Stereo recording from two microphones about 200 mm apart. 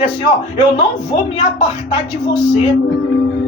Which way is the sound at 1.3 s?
25° left (ahead or behind).